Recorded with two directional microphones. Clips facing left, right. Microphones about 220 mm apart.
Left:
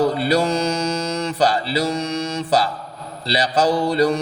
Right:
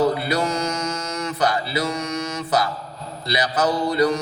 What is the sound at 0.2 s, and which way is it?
Mantra, 30° left (ahead or behind).